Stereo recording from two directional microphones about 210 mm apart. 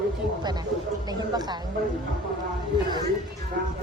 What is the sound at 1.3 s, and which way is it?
Speech, 20° right (ahead or behind).